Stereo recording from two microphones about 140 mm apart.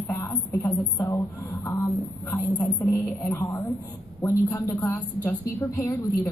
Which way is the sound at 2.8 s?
25° left (ahead or behind).